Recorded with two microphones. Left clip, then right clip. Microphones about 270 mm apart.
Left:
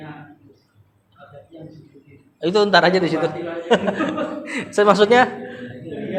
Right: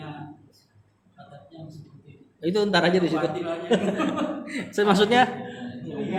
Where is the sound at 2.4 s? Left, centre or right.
Centre.